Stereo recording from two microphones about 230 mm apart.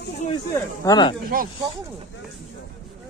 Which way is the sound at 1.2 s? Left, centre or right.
Right.